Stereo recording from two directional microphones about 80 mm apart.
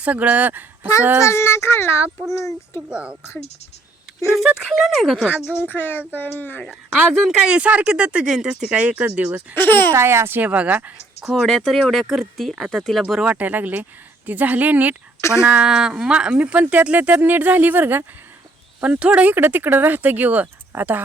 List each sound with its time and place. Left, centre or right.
0.0 s speech: centre
1.2 s speech: left
2.9 s speech: centre
4.4 s speech: centre
5.4 s speech: left
6.6 s speech: centre
7.3 s speech: centre
9.6 s speech: left
9.9 s speech: right
10.4 s speech: centre
11.3 s speech: centre
13.3 s speech: right
15.2 s speech: left
15.4 s speech: centre